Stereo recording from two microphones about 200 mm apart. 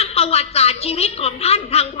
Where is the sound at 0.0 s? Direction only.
30° left (ahead or behind).